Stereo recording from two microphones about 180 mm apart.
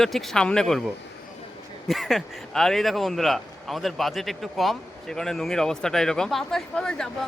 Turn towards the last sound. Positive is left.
turn(degrees=5)  # may be behind; listen again after turning